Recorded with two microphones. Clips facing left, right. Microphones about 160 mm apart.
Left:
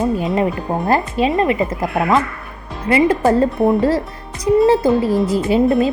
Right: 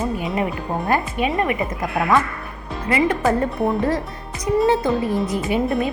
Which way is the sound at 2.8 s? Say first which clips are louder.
Left 5 dB; 30° left (ahead or behind).